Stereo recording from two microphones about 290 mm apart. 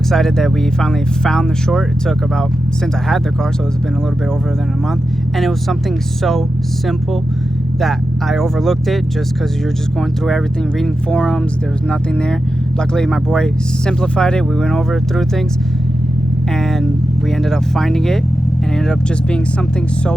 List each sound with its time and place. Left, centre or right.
0.1 s speech: centre
5.4 s speech: centre
7.8 s speech: centre
10.2 s speech: centre
12.9 s speech: centre
17.4 s speech: centre